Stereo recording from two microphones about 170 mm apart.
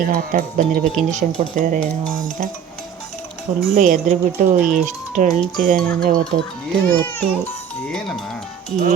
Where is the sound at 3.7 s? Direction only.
50° right (ahead or behind).